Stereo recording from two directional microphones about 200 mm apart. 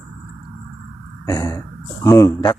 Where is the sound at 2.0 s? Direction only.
15° left (ahead or behind).